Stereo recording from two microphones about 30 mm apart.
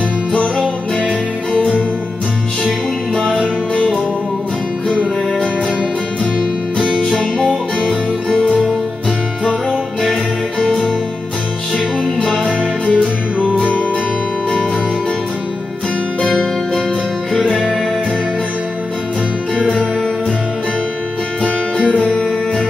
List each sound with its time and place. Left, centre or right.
8.3 s music: centre
12.9 s music: right